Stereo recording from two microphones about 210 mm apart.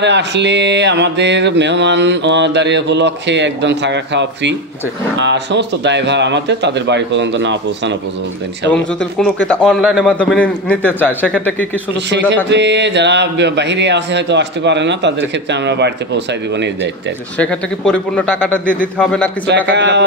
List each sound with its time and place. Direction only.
0.0 s mantra: 55° right (ahead or behind)
9.5 s a man's voice: centre (ahead or behind)
12.4 s mantra: 55° right (ahead or behind)
17.4 s speech: 5° left (ahead or behind)
19.7 s mantra: 55° right (ahead or behind)